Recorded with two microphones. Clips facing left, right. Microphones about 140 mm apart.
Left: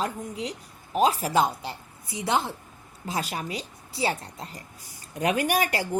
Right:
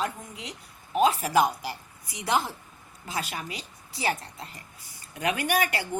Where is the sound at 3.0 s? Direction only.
35° left (ahead or behind).